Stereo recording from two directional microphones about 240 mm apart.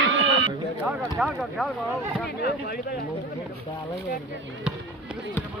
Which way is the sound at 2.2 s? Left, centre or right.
Left.